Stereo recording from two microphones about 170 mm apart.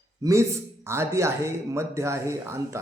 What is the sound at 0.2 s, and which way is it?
Speech, 15° right (ahead or behind).